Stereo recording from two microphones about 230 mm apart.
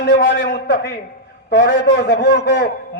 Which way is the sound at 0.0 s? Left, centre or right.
Left.